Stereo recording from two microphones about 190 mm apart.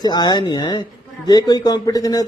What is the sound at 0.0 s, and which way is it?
Speech, 20° left (ahead or behind).